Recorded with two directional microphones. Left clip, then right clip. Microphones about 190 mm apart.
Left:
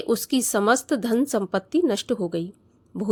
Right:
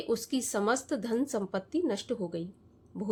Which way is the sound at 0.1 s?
45° left (ahead or behind).